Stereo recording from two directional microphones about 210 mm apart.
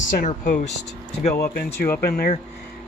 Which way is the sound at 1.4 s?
45° left (ahead or behind).